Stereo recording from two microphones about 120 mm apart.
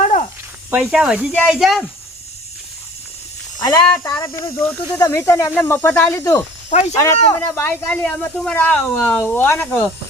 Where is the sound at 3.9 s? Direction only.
20° left (ahead or behind).